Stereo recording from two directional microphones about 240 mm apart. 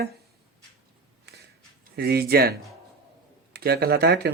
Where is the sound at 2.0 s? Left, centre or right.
Right.